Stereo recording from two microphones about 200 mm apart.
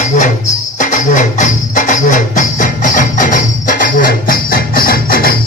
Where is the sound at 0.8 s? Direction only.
40° left (ahead or behind).